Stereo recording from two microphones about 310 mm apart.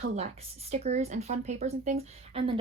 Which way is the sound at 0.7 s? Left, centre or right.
Right.